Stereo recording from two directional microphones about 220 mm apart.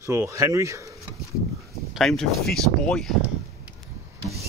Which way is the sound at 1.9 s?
Centre (ahead or behind).